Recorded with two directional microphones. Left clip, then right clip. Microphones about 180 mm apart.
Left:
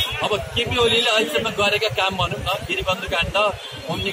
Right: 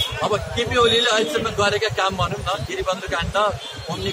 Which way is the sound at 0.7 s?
10° right (ahead or behind).